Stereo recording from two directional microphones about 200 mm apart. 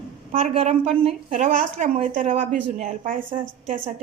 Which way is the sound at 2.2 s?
40° right (ahead or behind).